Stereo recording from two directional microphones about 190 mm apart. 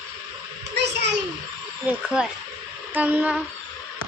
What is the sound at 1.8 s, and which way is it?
A child's voice, 5° right (ahead or behind).